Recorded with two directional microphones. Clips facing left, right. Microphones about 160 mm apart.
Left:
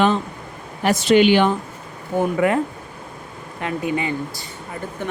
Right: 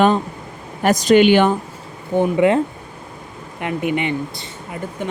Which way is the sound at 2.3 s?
25° right (ahead or behind).